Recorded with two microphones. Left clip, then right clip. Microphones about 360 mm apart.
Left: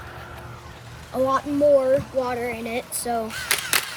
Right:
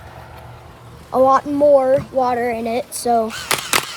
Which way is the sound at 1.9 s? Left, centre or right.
Centre.